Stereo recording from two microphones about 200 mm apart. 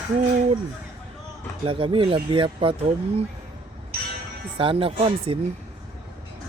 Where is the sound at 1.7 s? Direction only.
25° right (ahead or behind).